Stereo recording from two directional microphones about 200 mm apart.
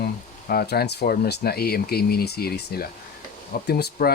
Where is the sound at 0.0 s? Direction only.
50° left (ahead or behind).